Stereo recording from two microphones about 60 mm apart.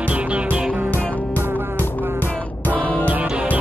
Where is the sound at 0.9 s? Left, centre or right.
Left.